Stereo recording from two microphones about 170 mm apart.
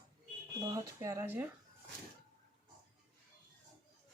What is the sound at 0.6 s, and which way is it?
Speech, 20° right (ahead or behind).